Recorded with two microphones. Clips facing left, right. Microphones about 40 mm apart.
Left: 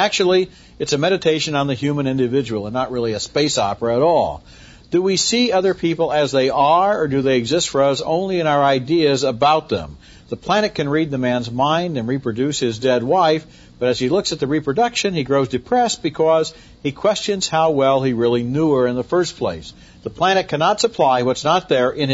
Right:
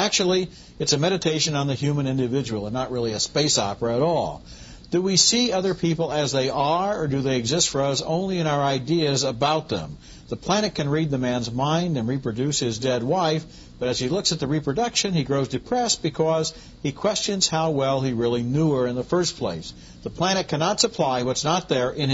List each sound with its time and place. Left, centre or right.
0.0 s speech: left